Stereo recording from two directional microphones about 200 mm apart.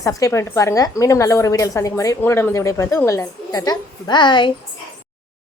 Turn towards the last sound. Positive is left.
turn(degrees=20)  # may be behind; listen again after turning